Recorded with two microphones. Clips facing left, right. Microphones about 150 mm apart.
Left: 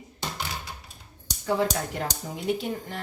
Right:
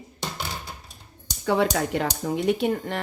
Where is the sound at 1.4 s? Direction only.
75° right (ahead or behind).